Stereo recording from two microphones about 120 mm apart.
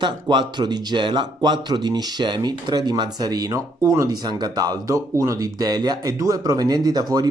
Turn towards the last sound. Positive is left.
turn(degrees=-35)  # may be behind; listen again after turning